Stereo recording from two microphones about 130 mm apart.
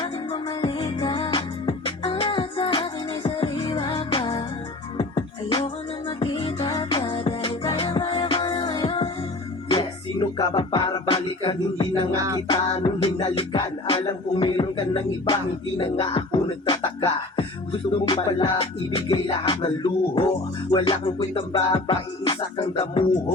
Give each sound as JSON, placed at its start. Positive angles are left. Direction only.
{"t": 0.0, "sound": "music", "side_deg": 40}
{"t": 12.1, "sound": "music", "side_deg": -25}
{"t": 12.8, "sound": "beatboxing", "side_deg": 35}